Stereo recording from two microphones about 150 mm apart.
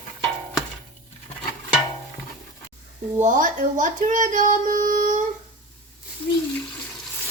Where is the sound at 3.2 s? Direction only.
60° right (ahead or behind).